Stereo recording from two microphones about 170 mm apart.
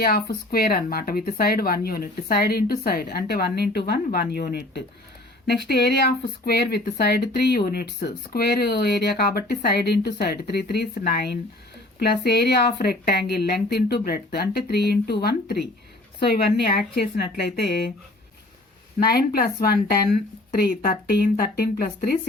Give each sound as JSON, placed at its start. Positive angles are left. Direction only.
{"t": 0.0, "sound": "speech", "side_deg": 65}
{"t": 19.0, "sound": "speech", "side_deg": 65}